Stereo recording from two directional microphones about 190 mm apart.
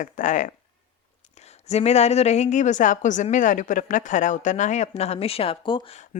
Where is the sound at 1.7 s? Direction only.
35° left (ahead or behind).